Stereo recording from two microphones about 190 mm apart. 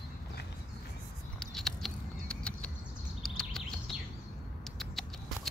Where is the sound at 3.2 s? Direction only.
Centre (ahead or behind).